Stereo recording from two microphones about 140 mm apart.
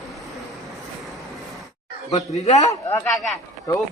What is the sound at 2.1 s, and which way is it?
Speech, 55° left (ahead or behind).